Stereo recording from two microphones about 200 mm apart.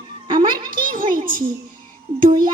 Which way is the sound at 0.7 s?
45° right (ahead or behind).